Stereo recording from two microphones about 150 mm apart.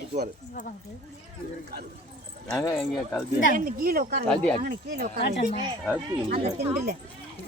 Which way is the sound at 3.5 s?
70° right (ahead or behind).